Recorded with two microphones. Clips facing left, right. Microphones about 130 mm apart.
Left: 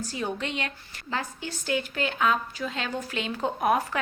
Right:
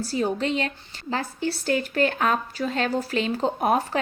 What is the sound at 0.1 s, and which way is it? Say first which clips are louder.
A woman's voice: right 9 dB; 35° right (ahead or behind).